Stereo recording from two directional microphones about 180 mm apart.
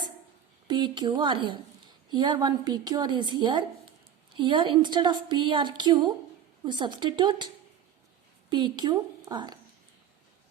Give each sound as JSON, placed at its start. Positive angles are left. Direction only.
{"t": 0.7, "sound": "a woman's voice", "side_deg": -25}